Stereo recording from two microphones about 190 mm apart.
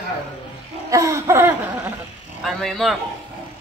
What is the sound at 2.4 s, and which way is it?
Speech, centre (ahead or behind).